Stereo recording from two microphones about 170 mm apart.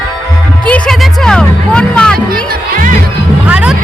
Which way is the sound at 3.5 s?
5° right (ahead or behind).